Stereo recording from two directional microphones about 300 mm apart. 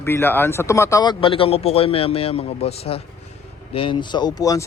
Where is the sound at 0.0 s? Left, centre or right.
Centre.